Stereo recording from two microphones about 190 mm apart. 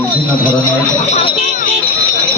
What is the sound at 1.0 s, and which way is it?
Speech, 35° left (ahead or behind).